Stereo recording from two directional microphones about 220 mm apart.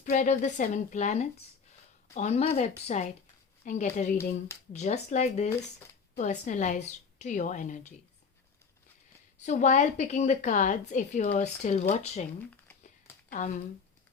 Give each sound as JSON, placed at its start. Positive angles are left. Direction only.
{"t": 0.0, "sound": "a woman's voice", "side_deg": 35}
{"t": 9.4, "sound": "a woman's voice", "side_deg": 30}
{"t": 13.3, "sound": "a woman's voice", "side_deg": 35}